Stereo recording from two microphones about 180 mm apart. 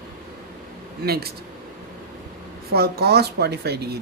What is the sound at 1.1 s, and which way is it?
Speech, 60° right (ahead or behind).